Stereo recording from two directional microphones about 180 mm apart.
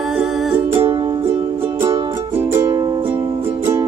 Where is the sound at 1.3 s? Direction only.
15° right (ahead or behind).